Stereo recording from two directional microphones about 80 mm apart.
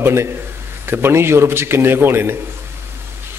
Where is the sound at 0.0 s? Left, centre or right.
Right.